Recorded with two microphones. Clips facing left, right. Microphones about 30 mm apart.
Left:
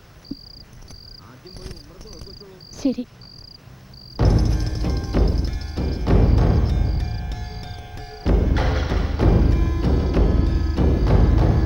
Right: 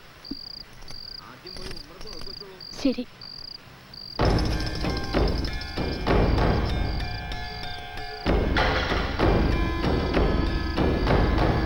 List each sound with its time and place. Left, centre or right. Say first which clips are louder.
2.7 s speech: left 3 dB; right
4.2 s music: left 2 dB; right